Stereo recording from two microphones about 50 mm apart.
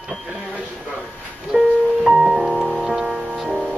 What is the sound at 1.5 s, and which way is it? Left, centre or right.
Music, centre.